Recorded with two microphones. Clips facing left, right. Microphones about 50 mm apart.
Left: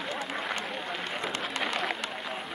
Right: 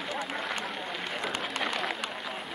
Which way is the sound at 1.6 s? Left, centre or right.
Centre.